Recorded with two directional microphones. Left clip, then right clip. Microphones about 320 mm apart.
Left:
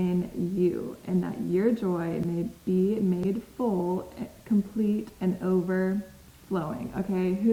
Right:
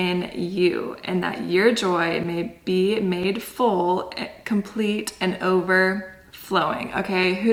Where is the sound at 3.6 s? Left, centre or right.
Centre.